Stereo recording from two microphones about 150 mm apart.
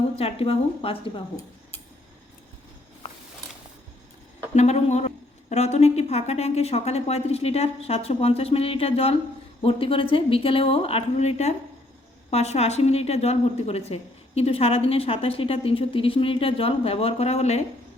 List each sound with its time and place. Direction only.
0.2 s a woman's voice: 40° left (ahead or behind)
4.5 s a woman's voice: 50° left (ahead or behind)